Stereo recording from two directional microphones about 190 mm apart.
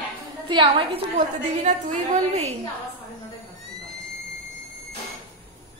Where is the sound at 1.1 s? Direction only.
40° right (ahead or behind).